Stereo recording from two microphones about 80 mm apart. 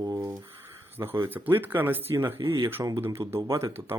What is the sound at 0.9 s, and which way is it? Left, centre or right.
A man's voice, right.